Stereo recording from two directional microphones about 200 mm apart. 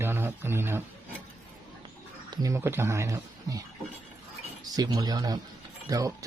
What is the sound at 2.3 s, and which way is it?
Speech, 20° right (ahead or behind).